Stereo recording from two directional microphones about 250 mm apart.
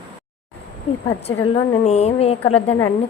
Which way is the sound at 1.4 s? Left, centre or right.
Left.